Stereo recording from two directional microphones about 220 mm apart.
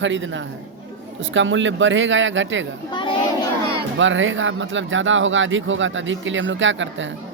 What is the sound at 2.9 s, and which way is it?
Speech, 20° left (ahead or behind).